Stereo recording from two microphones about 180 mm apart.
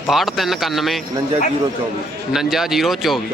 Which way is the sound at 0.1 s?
Centre (ahead or behind).